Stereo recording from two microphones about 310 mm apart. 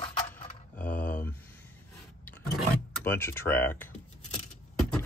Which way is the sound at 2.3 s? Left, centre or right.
Centre.